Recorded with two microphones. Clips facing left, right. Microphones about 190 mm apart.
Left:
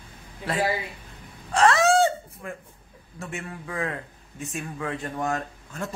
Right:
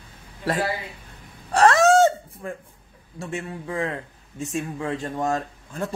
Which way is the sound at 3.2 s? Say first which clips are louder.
Right 4 dB; 30° right (ahead or behind).